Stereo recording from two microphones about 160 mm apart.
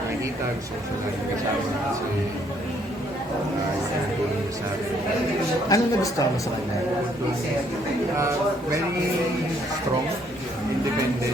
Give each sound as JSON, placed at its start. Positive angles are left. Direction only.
{"t": 5.6, "sound": "speech", "side_deg": 20}